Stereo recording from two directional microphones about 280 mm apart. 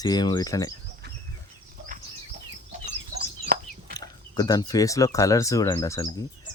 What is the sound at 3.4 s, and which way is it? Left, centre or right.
Chicken, right.